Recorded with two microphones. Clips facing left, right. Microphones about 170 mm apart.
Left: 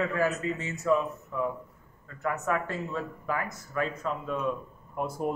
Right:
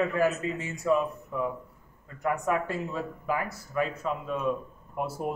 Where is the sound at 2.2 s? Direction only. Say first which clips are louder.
Right 2 dB; 15° right (ahead or behind).